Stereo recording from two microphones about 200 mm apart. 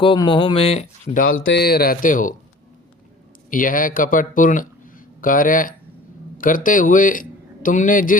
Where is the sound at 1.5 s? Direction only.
50° left (ahead or behind).